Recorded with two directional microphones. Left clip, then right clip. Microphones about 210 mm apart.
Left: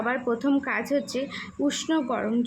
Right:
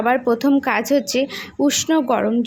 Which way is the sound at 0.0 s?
30° right (ahead or behind).